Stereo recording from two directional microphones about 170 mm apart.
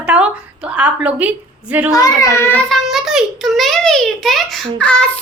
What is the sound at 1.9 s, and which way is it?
Speech, 20° left (ahead or behind).